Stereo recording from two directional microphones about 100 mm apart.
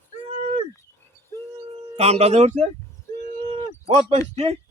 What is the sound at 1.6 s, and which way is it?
Speech, 90° right.